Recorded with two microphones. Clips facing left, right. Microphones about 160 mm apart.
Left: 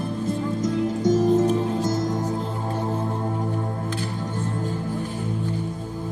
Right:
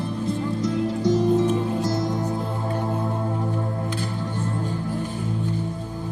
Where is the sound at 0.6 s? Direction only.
45° left (ahead or behind).